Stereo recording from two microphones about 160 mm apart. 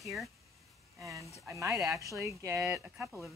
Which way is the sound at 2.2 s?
15° right (ahead or behind).